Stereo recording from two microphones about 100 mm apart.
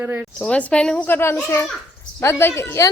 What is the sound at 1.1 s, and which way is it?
A woman's voice, 20° left (ahead or behind).